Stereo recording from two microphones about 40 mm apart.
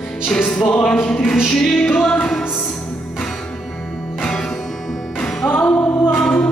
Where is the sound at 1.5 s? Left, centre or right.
Centre.